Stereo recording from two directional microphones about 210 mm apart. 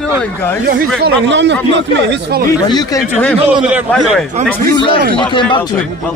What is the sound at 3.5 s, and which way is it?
Speech, 5° right (ahead or behind).